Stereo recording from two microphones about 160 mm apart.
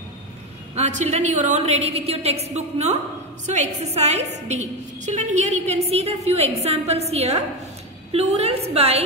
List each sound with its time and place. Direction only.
0.7 s a woman's voice: 45° right (ahead or behind)